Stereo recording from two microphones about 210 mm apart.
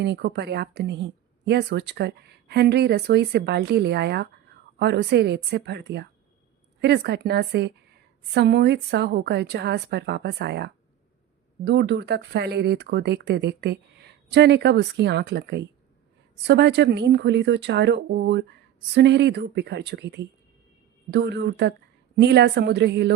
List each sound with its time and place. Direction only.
0.0 s a woman's voice: 55° right (ahead or behind)